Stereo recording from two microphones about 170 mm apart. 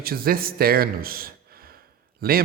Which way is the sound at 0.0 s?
60° right (ahead or behind).